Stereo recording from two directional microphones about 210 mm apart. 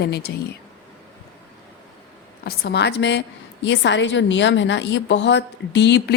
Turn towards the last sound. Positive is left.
turn(degrees=55)  # may be behind; listen again after turning